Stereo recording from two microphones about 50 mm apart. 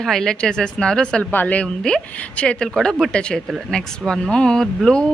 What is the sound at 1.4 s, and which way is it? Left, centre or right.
Speech, left.